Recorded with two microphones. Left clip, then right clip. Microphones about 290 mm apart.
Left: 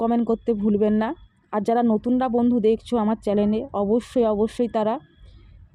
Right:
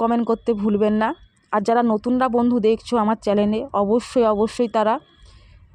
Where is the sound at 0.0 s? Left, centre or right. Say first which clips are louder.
Right 2 dB; right.